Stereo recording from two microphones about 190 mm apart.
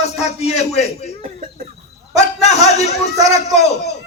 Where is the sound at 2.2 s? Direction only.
35° left (ahead or behind).